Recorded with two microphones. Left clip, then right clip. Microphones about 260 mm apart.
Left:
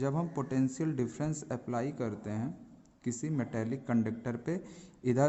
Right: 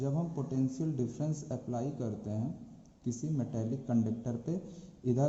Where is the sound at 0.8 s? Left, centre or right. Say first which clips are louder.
Left 2 dB; left.